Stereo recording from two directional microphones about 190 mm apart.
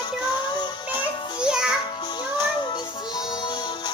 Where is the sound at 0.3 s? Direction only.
25° left (ahead or behind).